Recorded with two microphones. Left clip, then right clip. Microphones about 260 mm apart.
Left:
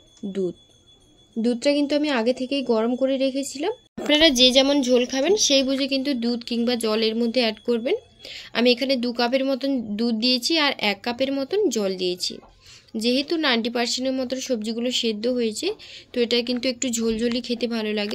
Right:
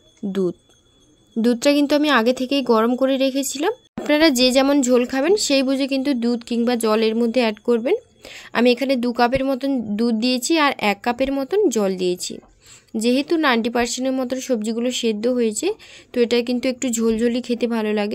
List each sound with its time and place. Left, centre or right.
0.3 s speech: right